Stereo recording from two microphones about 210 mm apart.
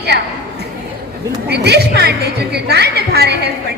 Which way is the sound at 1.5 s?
50° right (ahead or behind).